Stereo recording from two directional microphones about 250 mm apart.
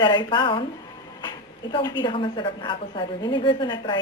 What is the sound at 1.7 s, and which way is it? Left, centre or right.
A woman's voice, centre.